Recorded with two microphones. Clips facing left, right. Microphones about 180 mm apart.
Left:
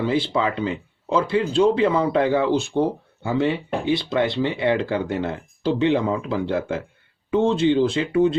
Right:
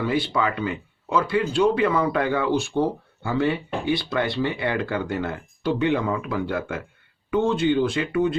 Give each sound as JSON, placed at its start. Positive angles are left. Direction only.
{"t": 0.0, "sound": "speech", "side_deg": 25}